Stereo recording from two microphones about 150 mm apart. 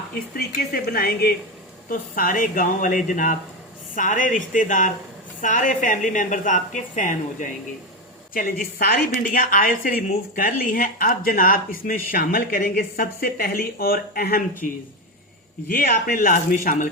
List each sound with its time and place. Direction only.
0.1 s speech: 85° left
1.9 s a woman's voice: 70° left (ahead or behind); by 14.4 s 90° left
14.6 s a woman's voice: 65° left (ahead or behind)
15.6 s a woman's voice: 80° left; by 16.9 s 65° left (ahead or behind)